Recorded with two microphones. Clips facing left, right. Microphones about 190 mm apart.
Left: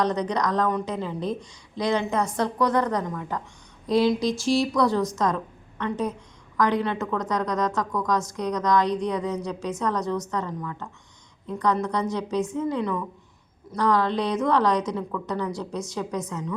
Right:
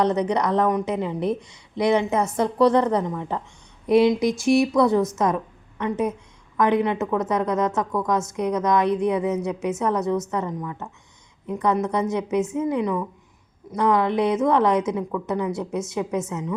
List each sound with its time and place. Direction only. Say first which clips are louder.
0.0 s a woman's voice: right 3 dB; 25° right (ahead or behind)